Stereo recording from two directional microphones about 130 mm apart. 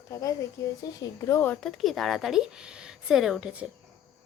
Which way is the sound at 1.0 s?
20° left (ahead or behind).